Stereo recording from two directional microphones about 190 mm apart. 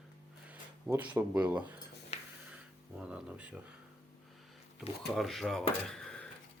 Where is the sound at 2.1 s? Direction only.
35° left (ahead or behind).